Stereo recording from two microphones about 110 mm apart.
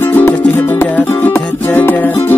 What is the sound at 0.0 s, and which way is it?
Music, 20° left (ahead or behind).